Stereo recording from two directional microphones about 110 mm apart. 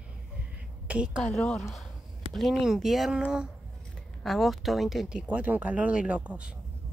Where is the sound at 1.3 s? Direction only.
5° left (ahead or behind); by 6.5 s 10° right (ahead or behind).